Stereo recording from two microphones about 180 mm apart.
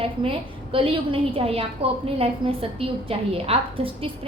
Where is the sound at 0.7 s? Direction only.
30° right (ahead or behind).